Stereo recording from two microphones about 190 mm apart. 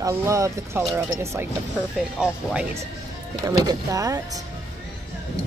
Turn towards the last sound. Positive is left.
turn(degrees=-20)  # may be behind; listen again after turning